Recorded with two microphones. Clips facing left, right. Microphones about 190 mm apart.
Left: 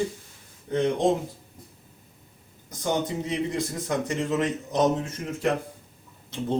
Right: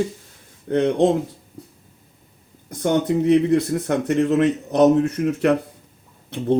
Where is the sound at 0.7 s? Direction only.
65° right (ahead or behind).